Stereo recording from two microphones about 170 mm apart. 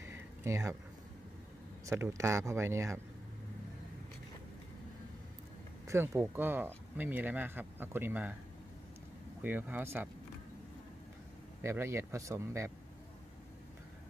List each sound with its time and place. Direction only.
0.0 s a sound: 15° right (ahead or behind)
1.9 s speech: 15° right (ahead or behind)
5.9 s speech: 15° right (ahead or behind)
9.4 s speech: 10° right (ahead or behind)
11.6 s speech: 15° right (ahead or behind)